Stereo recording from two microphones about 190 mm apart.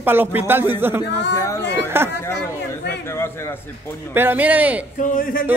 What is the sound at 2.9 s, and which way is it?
Speech, 15° left (ahead or behind).